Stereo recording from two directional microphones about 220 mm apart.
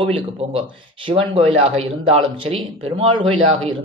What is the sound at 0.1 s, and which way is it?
Speech, 25° right (ahead or behind).